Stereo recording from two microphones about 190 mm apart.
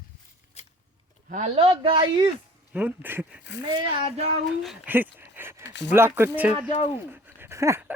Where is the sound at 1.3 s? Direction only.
35° right (ahead or behind).